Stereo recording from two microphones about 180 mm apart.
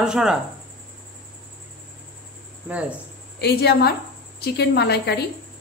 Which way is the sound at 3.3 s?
65° left (ahead or behind).